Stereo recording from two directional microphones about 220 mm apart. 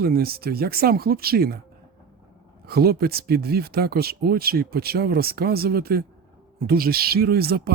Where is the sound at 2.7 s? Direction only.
45° right (ahead or behind).